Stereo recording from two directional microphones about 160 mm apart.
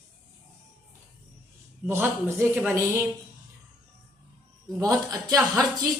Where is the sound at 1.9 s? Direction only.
15° right (ahead or behind).